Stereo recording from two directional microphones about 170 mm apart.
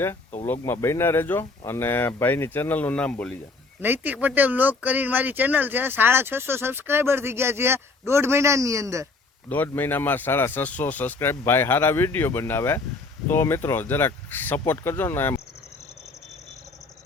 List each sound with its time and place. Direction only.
0.4 s speech: 15° left (ahead or behind)
3.8 s speech: 10° right (ahead or behind)
9.5 s speech: 10° left (ahead or behind)